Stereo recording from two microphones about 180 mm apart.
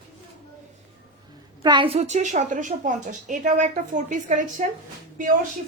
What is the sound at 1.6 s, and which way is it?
A woman's voice, 25° right (ahead or behind).